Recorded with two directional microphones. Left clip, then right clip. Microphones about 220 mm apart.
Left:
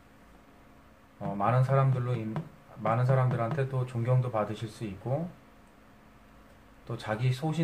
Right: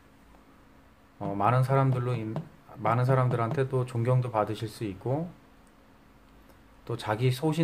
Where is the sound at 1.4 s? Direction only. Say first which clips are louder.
Right 2 dB; 45° right (ahead or behind).